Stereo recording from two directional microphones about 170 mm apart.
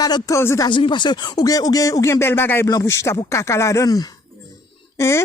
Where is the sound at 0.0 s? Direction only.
20° left (ahead or behind).